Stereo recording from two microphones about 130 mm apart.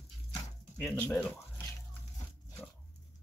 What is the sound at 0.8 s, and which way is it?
Speech, 10° left (ahead or behind).